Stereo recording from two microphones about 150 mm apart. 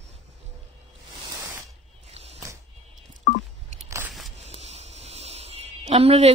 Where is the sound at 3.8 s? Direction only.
20° right (ahead or behind).